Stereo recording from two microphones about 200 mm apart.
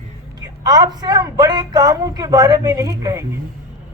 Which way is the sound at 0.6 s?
20° right (ahead or behind).